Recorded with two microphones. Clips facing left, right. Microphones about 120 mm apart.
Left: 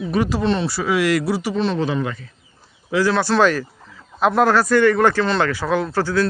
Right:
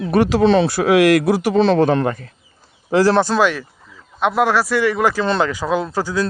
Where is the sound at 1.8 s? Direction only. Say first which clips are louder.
Right 6 dB; 50° right (ahead or behind).